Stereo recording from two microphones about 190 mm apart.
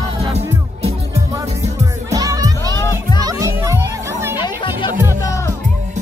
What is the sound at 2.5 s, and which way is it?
Music, 15° left (ahead or behind).